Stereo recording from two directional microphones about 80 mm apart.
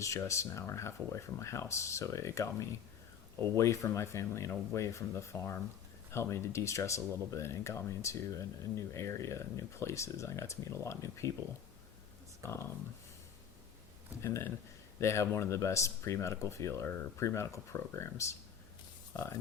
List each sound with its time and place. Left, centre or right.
0.0 s speech: left
12.4 s speech: left
14.2 s speech: left